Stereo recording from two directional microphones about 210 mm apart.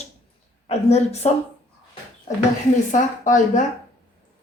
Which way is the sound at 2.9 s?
35° left (ahead or behind).